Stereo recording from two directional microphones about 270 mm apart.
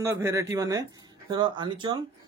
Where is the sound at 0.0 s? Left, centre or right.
Centre.